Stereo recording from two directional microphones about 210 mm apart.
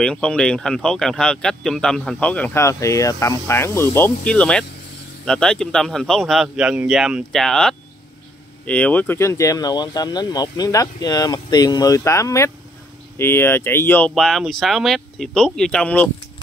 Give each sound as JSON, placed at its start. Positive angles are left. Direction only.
{"t": 0.0, "sound": "speech", "side_deg": 5}